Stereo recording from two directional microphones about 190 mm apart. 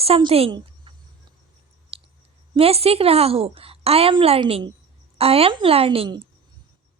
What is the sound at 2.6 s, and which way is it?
A woman's voice, 30° right (ahead or behind).